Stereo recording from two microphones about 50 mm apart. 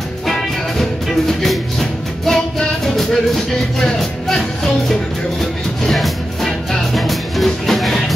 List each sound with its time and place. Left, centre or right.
0.3 s music: centre
5.4 s music: centre